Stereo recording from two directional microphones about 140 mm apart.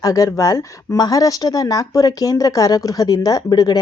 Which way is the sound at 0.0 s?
25° left (ahead or behind).